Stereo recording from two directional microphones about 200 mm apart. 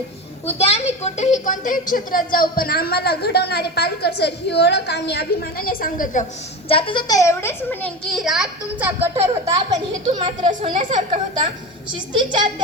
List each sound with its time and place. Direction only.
0.4 s speech: 30° left (ahead or behind)
6.7 s a child's voice: 25° left (ahead or behind); by 9.0 s 5° right (ahead or behind)
9.2 s speech: 15° right (ahead or behind)